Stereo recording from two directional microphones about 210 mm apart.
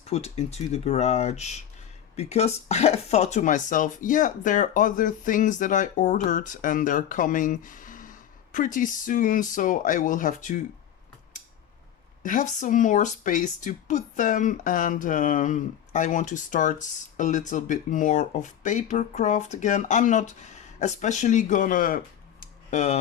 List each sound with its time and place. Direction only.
0.0 s speech: 30° left (ahead or behind)
12.2 s speech: 40° left (ahead or behind)